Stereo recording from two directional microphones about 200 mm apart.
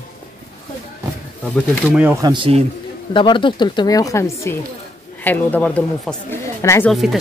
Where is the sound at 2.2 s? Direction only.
25° right (ahead or behind).